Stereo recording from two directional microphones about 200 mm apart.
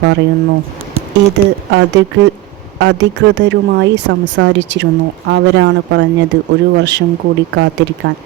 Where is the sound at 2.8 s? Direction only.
60° right (ahead or behind).